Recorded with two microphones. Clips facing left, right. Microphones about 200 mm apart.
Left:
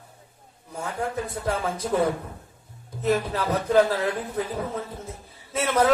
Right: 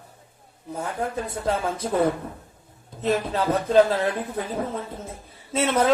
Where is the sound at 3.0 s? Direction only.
25° right (ahead or behind).